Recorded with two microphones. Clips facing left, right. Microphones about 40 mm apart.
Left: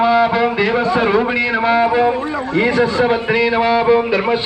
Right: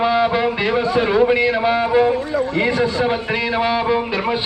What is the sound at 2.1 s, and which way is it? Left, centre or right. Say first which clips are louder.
Speech: right 1 dB; left.